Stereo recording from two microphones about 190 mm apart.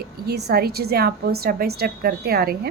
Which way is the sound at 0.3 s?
60° right (ahead or behind).